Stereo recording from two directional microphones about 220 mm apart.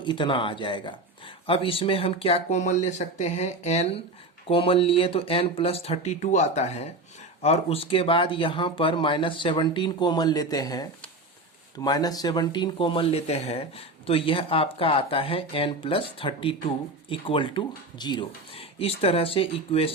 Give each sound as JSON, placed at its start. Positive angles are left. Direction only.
{"t": 0.0, "sound": "speech", "side_deg": 20}